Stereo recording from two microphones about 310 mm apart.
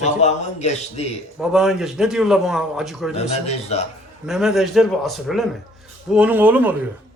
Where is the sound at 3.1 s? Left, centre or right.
Centre.